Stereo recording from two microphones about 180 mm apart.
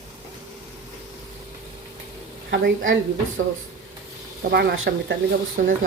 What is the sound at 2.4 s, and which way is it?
Speech, 80° right.